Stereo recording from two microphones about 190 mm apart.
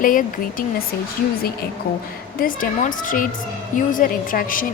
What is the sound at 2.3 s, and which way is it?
A woman's voice, 45° left (ahead or behind).